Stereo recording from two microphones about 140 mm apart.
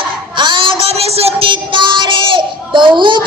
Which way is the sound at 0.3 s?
35° right (ahead or behind).